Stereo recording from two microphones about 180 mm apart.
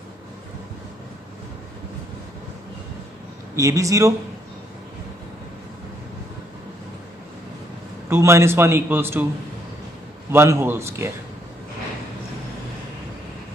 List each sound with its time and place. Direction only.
3.5 s a man's voice: 15° right (ahead or behind)
8.1 s a man's voice: 15° right (ahead or behind)
10.3 s a man's voice: 15° right (ahead or behind)